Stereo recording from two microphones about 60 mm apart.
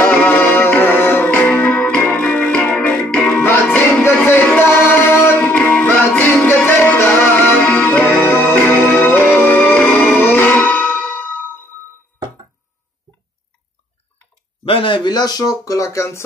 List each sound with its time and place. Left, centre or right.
0.0 s music: left
4.2 s a sound: left
4.6 s music: left
5.4 s music: left
7.6 s music: left
10.5 s music: left
15.3 s speech: left